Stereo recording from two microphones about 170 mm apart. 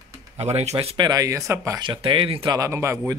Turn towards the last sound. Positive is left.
turn(degrees=-15)  # may be behind; listen again after turning